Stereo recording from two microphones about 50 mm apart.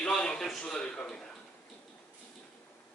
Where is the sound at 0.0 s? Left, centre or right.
Centre.